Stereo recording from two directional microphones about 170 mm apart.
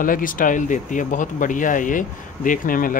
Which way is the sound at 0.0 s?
55° left (ahead or behind).